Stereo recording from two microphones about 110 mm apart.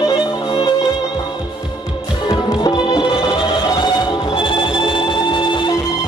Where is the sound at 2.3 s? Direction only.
35° left (ahead or behind).